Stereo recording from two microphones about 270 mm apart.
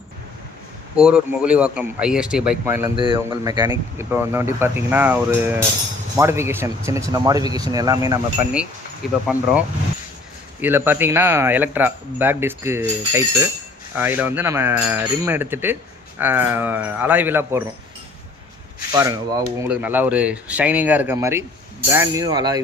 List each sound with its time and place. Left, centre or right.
0.9 s speech: centre
18.9 s speech: centre